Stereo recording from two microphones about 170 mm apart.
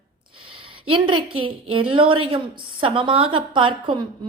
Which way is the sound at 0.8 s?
30° right (ahead or behind).